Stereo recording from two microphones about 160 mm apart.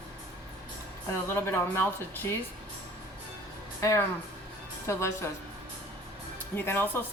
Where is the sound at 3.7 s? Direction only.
20° left (ahead or behind).